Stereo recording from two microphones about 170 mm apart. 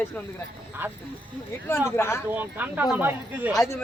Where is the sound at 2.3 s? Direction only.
10° right (ahead or behind).